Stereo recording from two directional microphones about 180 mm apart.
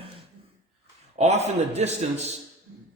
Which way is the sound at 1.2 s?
40° right (ahead or behind).